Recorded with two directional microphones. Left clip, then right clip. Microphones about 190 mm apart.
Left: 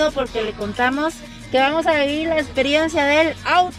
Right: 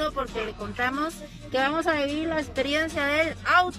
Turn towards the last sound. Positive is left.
turn(degrees=15)  # may be behind; listen again after turning